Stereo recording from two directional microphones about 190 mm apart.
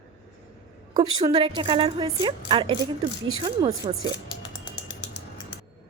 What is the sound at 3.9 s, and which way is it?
Speech, 30° right (ahead or behind).